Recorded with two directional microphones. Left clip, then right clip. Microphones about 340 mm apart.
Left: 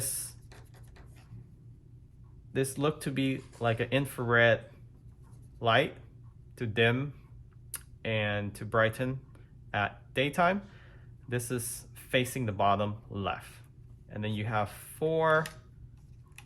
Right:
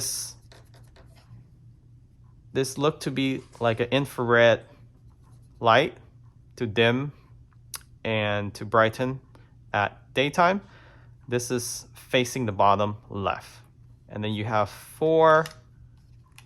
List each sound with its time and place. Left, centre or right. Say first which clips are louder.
0.0 s writing: right 9 dB; centre
2.5 s speech: right 6 dB; centre